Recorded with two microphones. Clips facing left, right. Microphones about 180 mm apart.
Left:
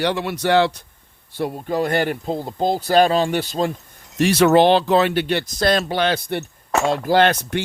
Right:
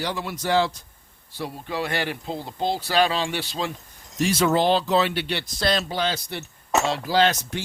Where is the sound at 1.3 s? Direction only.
55° left (ahead or behind).